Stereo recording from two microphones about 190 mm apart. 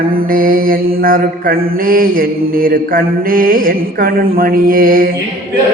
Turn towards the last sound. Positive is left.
turn(degrees=-50)  # may be behind; listen again after turning